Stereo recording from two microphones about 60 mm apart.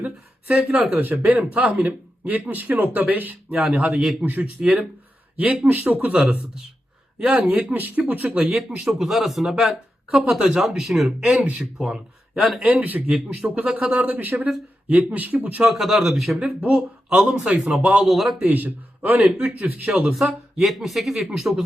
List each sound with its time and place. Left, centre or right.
0.0 s speech: right
8.8 s speech: centre
11.3 s speech: right
15.6 s speech: centre
16.4 s a man's voice: centre
18.4 s speech: right
20.6 s speech: centre